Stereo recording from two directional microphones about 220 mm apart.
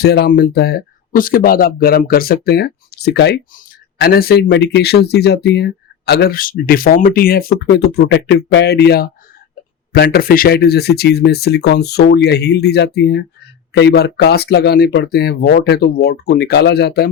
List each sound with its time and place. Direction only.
0.0 s speech: 45° left (ahead or behind)